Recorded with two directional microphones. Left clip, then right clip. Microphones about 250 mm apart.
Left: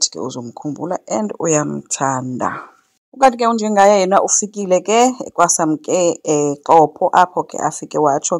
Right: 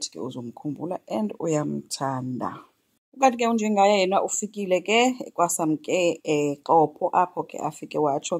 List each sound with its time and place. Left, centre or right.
0.1 s speech: left
3.6 s speech: left